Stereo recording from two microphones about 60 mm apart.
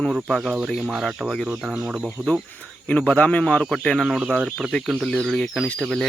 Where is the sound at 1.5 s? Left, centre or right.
Centre.